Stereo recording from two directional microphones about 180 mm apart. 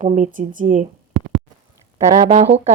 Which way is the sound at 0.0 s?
40° right (ahead or behind).